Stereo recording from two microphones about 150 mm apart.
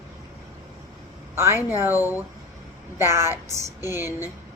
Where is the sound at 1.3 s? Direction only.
15° right (ahead or behind).